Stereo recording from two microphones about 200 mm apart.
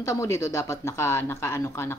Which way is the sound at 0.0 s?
15° left (ahead or behind).